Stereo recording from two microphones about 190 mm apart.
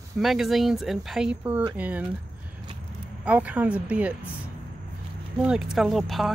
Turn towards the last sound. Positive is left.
turn(degrees=0)  # may be behind; listen again after turning